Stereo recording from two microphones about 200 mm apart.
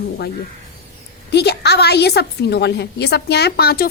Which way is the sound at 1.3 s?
55° left (ahead or behind).